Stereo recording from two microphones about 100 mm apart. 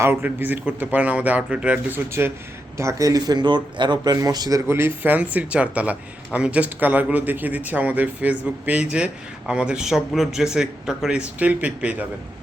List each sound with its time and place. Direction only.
0.0 s speech: 20° right (ahead or behind)
2.2 s speech: 20° right (ahead or behind)
2.7 s speech: 35° right (ahead or behind)
4.7 s speech: 25° right (ahead or behind)